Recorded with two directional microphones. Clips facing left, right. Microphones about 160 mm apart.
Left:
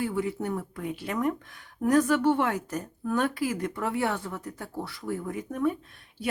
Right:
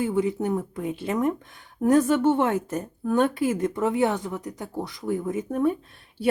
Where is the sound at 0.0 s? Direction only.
20° right (ahead or behind).